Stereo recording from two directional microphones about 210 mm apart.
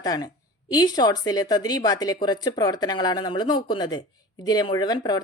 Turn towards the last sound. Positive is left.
turn(degrees=20)  # may be behind; listen again after turning